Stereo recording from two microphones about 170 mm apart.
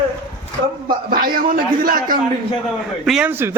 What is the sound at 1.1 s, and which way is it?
A man's voice, 55° right (ahead or behind).